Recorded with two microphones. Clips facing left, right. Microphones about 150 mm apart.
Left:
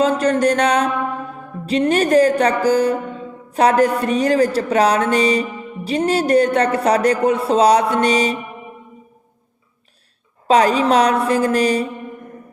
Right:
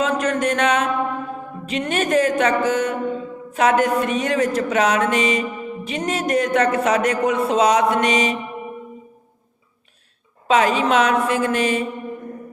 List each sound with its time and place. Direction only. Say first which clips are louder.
0.2 s music: left 4 dB; 35° left (ahead or behind)
10.4 s music: left 3 dB; 35° left (ahead or behind)